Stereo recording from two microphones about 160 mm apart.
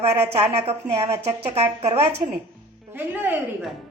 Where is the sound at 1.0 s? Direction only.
40° right (ahead or behind).